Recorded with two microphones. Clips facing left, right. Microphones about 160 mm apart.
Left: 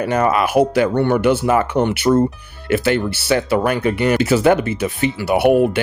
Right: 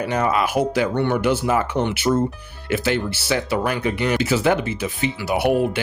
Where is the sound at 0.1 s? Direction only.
55° left (ahead or behind).